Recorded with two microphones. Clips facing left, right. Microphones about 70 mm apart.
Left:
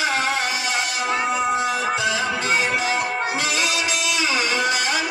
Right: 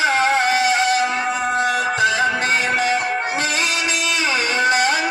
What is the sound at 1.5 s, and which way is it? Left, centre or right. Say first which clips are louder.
Music: right 3 dB; right.